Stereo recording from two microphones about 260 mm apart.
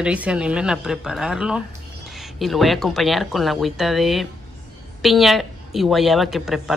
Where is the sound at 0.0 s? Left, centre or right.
Centre.